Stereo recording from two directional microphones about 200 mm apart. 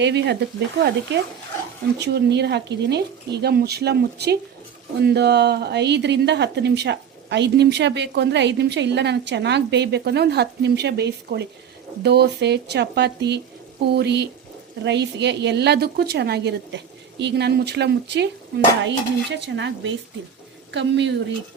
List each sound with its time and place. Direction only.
0.0 s speech: 60° right (ahead or behind)